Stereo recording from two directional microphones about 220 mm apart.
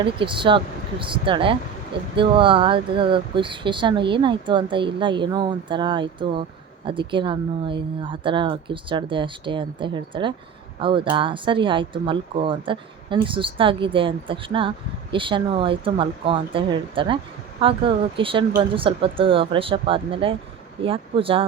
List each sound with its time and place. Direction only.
0.0 s speech: 25° right (ahead or behind)